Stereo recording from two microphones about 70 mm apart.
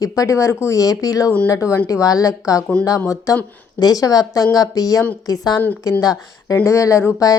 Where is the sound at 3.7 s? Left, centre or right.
Left.